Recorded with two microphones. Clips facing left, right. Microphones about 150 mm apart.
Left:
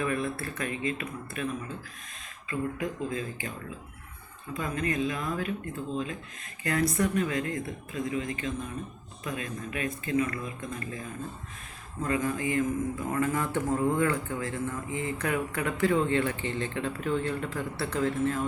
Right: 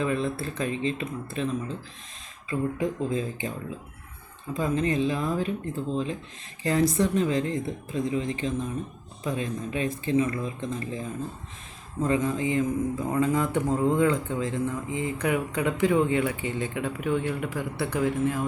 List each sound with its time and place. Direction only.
0.0 s speech: 20° right (ahead or behind)
4.5 s speech: 25° right (ahead or behind)
12.0 s a man's voice: 25° right (ahead or behind)